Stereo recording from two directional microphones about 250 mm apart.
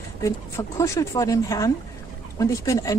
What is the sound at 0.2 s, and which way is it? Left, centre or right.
Speech, centre.